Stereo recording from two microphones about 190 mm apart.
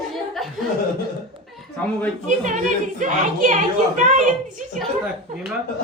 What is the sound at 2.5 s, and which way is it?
A woman's voice, 40° right (ahead or behind).